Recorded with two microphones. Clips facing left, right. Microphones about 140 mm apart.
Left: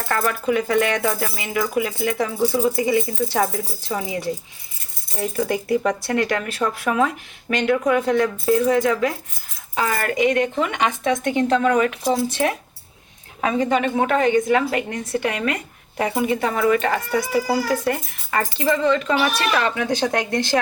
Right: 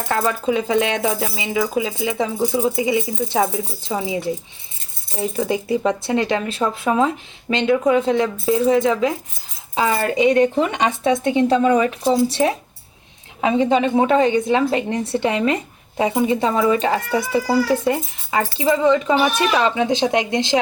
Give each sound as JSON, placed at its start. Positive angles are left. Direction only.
{"t": 0.0, "sound": "speech", "side_deg": -20}
{"t": 10.2, "sound": "speech", "side_deg": -35}